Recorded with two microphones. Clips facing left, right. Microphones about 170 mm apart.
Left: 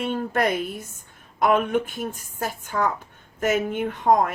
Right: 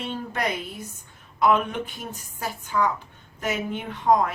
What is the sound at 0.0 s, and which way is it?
Speech, 50° left (ahead or behind).